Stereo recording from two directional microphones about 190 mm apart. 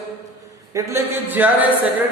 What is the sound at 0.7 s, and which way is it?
Speech, 10° right (ahead or behind).